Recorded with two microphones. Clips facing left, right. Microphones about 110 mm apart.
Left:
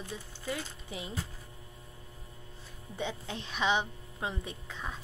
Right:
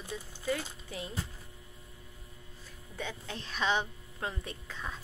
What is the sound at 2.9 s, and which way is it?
A woman's voice, 20° left (ahead or behind).